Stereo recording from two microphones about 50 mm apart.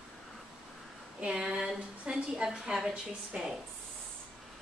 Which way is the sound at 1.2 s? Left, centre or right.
Centre.